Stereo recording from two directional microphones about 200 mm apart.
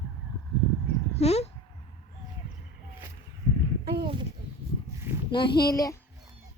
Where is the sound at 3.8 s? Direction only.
55° right (ahead or behind).